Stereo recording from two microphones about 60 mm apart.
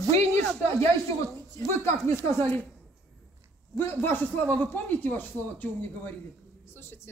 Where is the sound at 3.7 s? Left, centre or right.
Left.